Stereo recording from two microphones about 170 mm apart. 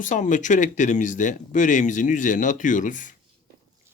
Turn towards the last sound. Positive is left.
turn(degrees=50)  # may be behind; listen again after turning